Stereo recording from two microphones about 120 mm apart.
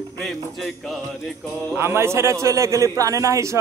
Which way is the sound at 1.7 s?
20° right (ahead or behind).